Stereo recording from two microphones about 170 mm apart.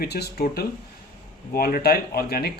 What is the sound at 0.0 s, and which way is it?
A man's voice, 70° left (ahead or behind).